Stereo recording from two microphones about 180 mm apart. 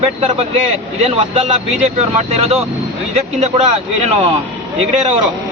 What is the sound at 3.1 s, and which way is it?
Speech, 40° right (ahead or behind).